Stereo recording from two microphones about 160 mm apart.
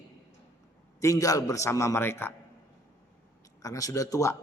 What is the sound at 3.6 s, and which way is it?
Speech, 20° left (ahead or behind).